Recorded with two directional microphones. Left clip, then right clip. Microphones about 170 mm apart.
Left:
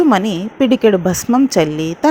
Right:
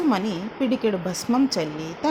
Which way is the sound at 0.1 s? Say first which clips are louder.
Left 10 dB; 45° left (ahead or behind).